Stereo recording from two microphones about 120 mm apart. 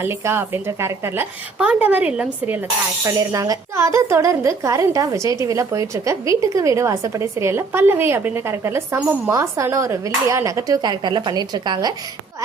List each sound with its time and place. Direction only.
0.0 s speech: 20° right (ahead or behind); by 11.9 s 35° right (ahead or behind)